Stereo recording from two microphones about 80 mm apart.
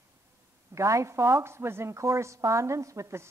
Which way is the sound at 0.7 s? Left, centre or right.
Right.